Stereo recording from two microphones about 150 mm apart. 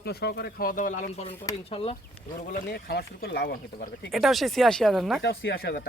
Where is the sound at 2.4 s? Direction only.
80° left.